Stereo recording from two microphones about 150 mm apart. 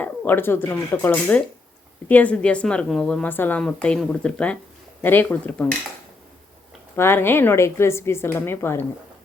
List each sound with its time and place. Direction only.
0.0 s a woman's voice: 15° left (ahead or behind)
6.9 s a woman's voice: 15° left (ahead or behind)